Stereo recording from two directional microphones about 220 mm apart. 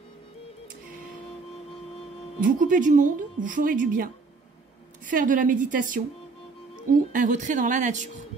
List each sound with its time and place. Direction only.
2.4 s a woman's voice: 35° right (ahead or behind)